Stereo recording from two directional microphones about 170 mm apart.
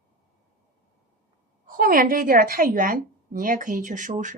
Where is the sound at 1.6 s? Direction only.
55° right (ahead or behind).